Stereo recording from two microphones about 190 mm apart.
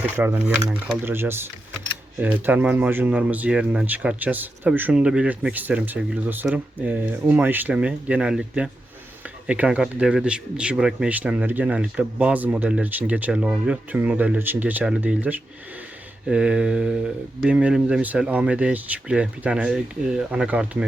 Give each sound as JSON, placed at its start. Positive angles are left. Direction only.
{"t": 0.0, "sound": "speech", "side_deg": -10}